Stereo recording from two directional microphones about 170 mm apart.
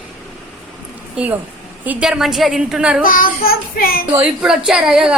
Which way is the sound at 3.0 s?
55° left (ahead or behind).